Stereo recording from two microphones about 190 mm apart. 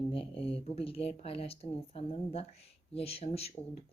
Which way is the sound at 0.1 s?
30° left (ahead or behind).